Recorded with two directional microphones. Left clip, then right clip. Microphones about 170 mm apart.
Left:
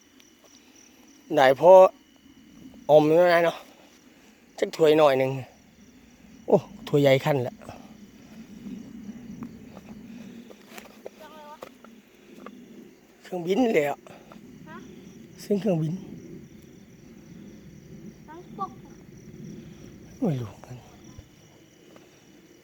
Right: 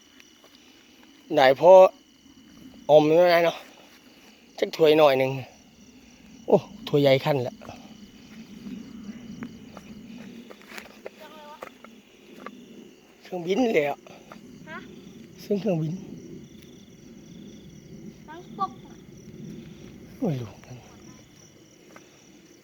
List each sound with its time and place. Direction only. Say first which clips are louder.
1.3 s speech: even; 5° left (ahead or behind)
6.4 s cricket: right 1 dB; 5° left (ahead or behind)
9.4 s cricket: right 2 dB; 60° left (ahead or behind)
9.7 s cricket: right 1 dB; 10° left (ahead or behind)
11.2 s a sound: even; 35° left (ahead or behind)
13.2 s speech: even; 15° left (ahead or behind)
15.4 s speech: left 1 dB; 20° left (ahead or behind)
18.3 s a sound: right 4 dB; 25° right (ahead or behind)
20.2 s speech: left 1 dB; 10° left (ahead or behind)